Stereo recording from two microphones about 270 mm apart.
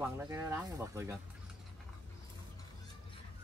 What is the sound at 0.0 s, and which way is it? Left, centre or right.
Speech, centre.